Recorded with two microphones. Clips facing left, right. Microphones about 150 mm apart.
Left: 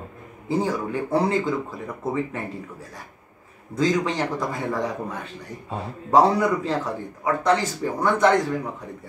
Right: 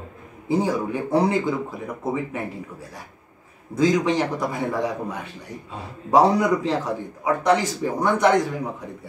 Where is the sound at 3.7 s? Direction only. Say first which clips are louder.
Right 3 dB; 15° right (ahead or behind).